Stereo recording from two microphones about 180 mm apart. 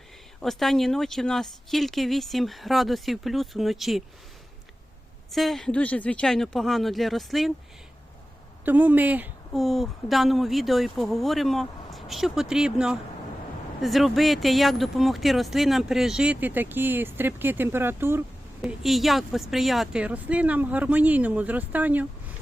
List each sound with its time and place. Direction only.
0.4 s a woman's voice: centre (ahead or behind)
5.3 s a woman's voice: centre (ahead or behind)
8.6 s a woman's voice: 10° right (ahead or behind)
18.6 s a woman's voice: centre (ahead or behind)